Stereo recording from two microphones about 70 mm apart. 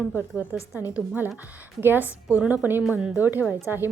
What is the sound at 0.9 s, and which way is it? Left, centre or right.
A woman's voice, right.